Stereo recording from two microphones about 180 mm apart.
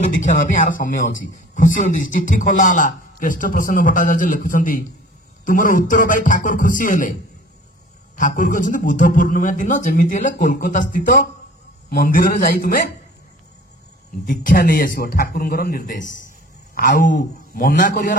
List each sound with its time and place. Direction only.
0.1 s a man's voice: 45° left (ahead or behind)
8.2 s a man's voice: 45° left (ahead or behind)
14.2 s a man's voice: 50° left (ahead or behind)